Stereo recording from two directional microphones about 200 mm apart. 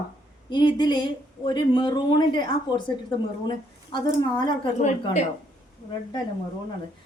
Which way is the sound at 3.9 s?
25° left (ahead or behind).